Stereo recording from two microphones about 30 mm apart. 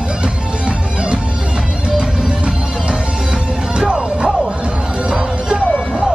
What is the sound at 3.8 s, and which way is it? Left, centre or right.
Music, right.